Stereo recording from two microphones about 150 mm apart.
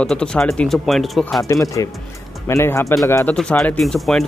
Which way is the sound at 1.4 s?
20° left (ahead or behind).